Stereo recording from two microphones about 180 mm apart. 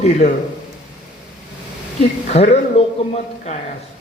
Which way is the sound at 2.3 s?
35° left (ahead or behind).